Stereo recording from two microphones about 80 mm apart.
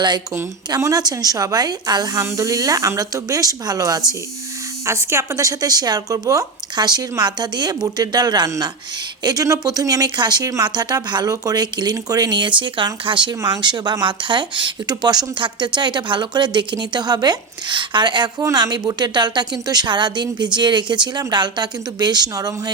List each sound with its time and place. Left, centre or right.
0.9 s speech: right
4.9 s speech: right
12.4 s speech: right
13.4 s speech: right
18.5 s speech: right